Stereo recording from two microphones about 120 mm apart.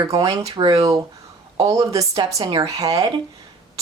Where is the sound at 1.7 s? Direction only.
25° right (ahead or behind).